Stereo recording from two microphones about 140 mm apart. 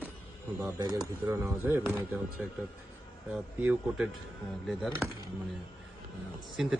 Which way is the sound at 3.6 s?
10° right (ahead or behind).